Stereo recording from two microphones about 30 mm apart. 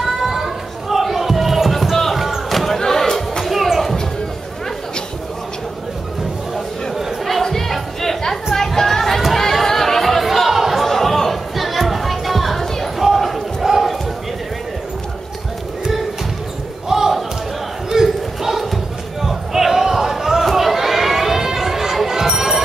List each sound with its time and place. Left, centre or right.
0.0 s a sound: centre
3.4 s music: centre
7.4 s crowd: centre
8.5 s music: centre
9.4 s chatter: centre
10.5 s chatter: centre
10.8 s chatter: centre
13.0 s basketball bounce: centre
16.9 s a sound: centre
19.2 s basketball bounce: centre
20.5 s chatter: centre
22.0 s a sound: centre